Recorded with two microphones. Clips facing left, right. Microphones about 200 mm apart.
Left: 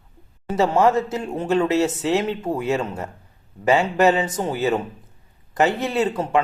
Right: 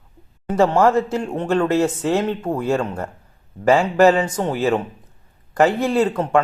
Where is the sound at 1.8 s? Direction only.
25° left (ahead or behind).